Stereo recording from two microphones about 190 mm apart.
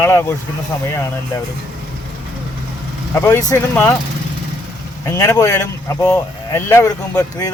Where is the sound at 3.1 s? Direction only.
15° left (ahead or behind).